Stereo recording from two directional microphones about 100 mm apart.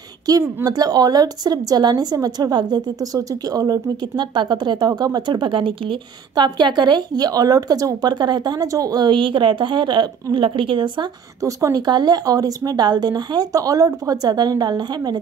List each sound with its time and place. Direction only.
0.7 s a woman's voice: 40° right (ahead or behind); by 11.1 s 55° right (ahead or behind)
11.4 s a woman's voice: 35° right (ahead or behind)